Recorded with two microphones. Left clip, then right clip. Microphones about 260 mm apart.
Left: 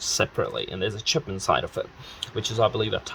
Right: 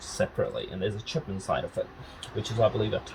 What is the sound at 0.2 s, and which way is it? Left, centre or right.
Speech, left.